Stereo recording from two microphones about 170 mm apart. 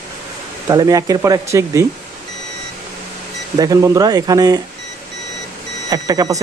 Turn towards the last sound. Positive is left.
turn(degrees=-20)  # may be behind; listen again after turning